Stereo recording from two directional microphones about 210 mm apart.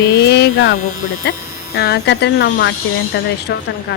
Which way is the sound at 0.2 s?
55° left (ahead or behind).